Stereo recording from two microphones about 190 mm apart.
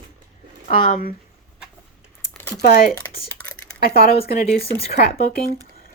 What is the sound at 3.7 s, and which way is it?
Speech, 50° left (ahead or behind).